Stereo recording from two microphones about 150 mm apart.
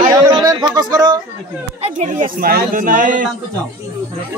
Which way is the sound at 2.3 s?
80° right.